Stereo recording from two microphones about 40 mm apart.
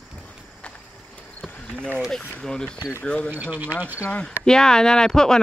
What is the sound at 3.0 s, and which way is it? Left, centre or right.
Speech, left.